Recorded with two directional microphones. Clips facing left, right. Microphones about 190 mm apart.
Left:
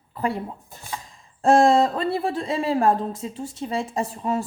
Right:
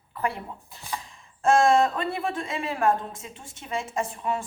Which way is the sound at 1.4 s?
35° left (ahead or behind).